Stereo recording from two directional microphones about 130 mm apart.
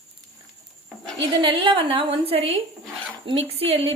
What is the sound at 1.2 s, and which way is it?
A woman's voice, 40° right (ahead or behind).